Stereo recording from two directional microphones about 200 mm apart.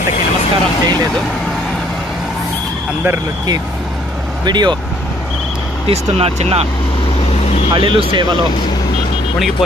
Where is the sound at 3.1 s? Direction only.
20° right (ahead or behind).